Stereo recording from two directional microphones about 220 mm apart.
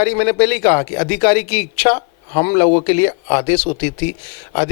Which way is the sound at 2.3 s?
30° left (ahead or behind).